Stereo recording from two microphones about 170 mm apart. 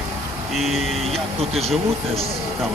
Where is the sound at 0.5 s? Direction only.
Centre (ahead or behind).